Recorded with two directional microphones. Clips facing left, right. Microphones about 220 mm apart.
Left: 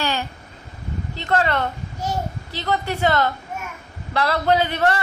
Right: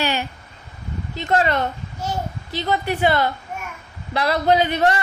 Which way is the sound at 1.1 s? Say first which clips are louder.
Right 2 dB; 15° right (ahead or behind).